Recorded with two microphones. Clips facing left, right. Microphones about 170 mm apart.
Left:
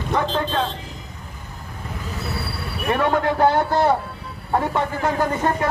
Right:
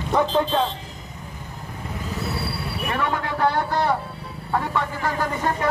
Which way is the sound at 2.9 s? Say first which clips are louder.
Left 7 dB; 35° left (ahead or behind).